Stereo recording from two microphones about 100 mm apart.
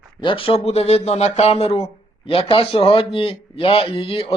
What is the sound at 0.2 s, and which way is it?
Speech, 60° left (ahead or behind).